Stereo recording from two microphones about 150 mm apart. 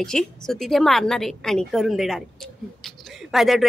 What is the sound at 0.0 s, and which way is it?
A woman's voice, 5° left (ahead or behind).